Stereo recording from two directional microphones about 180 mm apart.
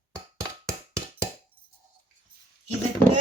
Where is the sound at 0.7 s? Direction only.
15° right (ahead or behind).